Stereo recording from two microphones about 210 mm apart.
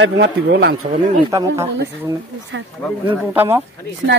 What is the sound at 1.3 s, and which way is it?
Speech, 15° right (ahead or behind).